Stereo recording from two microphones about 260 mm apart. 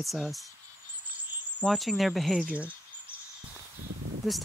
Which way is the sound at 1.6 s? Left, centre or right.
Centre.